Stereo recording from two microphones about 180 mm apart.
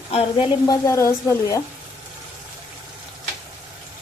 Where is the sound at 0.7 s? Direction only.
15° left (ahead or behind).